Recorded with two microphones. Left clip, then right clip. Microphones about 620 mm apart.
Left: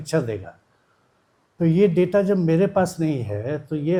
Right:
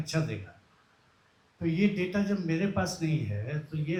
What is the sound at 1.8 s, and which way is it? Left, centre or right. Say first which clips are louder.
Speech: left 14 dB; left.